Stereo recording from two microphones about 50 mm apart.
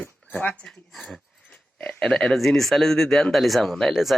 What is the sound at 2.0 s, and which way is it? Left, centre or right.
Speech, centre.